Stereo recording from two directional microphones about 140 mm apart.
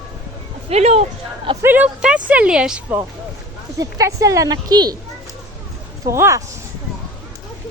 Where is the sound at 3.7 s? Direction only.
25° right (ahead or behind).